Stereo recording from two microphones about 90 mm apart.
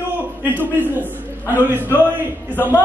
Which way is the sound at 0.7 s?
20° right (ahead or behind).